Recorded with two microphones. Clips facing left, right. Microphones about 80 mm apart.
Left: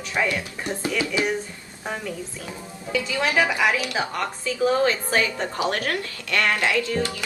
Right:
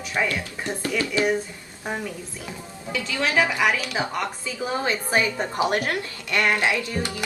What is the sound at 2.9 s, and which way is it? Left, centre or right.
Speech, centre.